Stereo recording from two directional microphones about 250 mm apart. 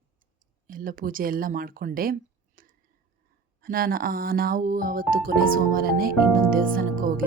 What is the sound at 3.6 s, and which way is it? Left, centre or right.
Speech, right.